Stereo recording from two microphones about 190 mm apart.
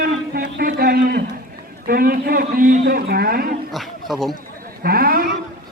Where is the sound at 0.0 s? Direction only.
50° right (ahead or behind).